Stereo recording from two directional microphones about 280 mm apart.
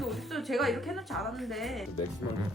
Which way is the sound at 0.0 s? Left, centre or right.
Centre.